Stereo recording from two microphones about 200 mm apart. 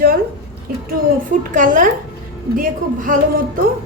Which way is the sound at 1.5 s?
40° right (ahead or behind).